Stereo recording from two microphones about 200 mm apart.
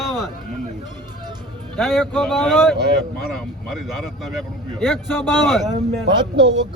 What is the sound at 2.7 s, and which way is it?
Speech, 55° right (ahead or behind).